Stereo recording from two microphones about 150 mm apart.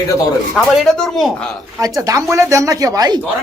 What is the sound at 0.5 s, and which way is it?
Speech, centre (ahead or behind).